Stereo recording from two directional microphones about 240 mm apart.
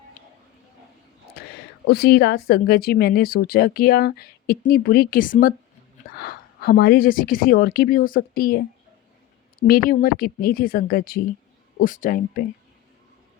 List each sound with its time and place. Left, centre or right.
1.9 s a woman's voice: left